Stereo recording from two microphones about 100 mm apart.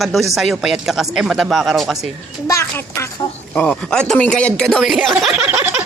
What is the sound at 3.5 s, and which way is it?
Speech, 10° left (ahead or behind).